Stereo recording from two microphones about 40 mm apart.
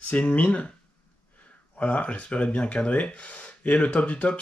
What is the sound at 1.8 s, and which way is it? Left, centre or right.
Speech, left.